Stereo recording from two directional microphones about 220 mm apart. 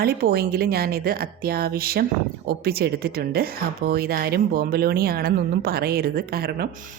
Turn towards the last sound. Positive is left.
turn(degrees=-45)  # may be behind; listen again after turning